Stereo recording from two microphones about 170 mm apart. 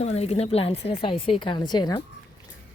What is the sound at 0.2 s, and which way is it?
A woman's voice, 40° left (ahead or behind).